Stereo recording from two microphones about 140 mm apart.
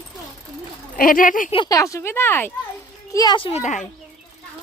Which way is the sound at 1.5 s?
40° left (ahead or behind).